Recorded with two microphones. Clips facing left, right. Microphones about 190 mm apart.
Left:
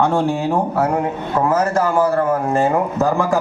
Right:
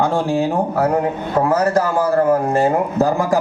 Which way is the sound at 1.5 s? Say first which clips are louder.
Left 1 dB; 35° right (ahead or behind).